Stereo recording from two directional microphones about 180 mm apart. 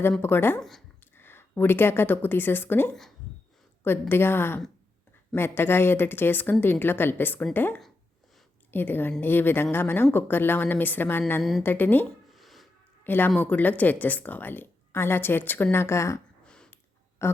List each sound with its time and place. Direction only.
0.2 s a woman's voice: 10° left (ahead or behind)
4.1 s a woman's voice: 10° left (ahead or behind)
12.3 s a sound: centre (ahead or behind)
13.1 s a woman's voice: 10° left (ahead or behind)